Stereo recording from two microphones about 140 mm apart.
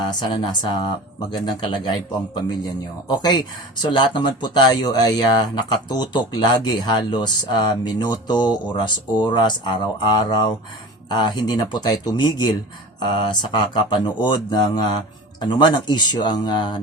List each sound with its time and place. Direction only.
0.0 s speech: 35° left (ahead or behind)
3.1 s speech: 30° left (ahead or behind)